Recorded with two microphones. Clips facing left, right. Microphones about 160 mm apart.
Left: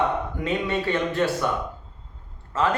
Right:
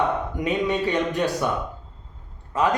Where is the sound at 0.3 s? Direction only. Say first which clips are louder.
Right 2 dB; 15° right (ahead or behind).